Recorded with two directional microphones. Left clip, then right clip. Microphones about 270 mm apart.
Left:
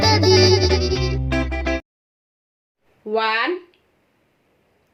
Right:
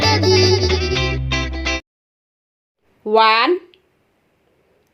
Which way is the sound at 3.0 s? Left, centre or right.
Right.